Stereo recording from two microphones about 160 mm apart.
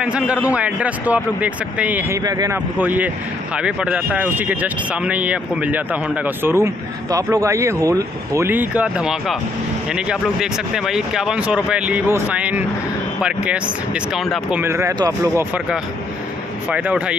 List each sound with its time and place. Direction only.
0.0 s speech: 5° right (ahead or behind)
2.8 s speech: 10° right (ahead or behind)
14.6 s speech: 15° right (ahead or behind)
16.6 s speech: 5° right (ahead or behind)